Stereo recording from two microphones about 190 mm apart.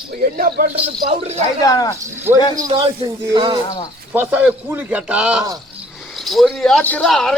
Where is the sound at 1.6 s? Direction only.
20° left (ahead or behind).